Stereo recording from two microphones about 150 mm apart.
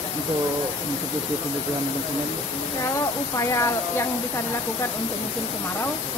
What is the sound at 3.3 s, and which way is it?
Speech, 20° left (ahead or behind).